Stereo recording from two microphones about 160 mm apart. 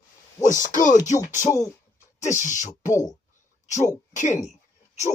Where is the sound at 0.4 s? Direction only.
55° left (ahead or behind).